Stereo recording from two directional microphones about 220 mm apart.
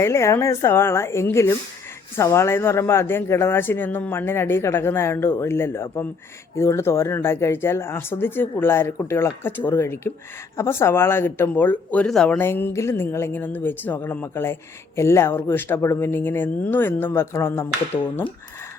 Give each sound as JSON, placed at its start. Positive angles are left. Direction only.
{"t": 0.0, "sound": "speech", "side_deg": 10}